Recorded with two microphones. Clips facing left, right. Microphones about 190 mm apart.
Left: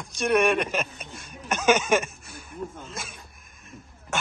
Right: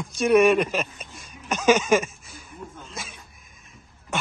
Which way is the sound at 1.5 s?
Centre (ahead or behind).